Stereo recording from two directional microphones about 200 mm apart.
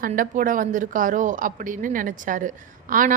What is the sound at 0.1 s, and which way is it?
A woman's voice, 40° right (ahead or behind).